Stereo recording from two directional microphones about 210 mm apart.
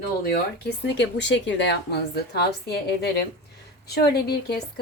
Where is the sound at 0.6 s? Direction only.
55° left (ahead or behind).